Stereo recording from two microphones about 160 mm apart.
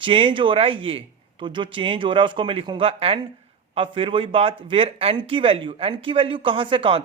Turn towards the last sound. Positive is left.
turn(degrees=-35)  # may be behind; listen again after turning